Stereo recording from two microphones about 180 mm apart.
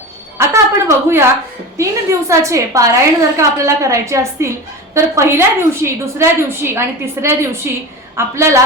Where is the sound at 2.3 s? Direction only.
15° right (ahead or behind).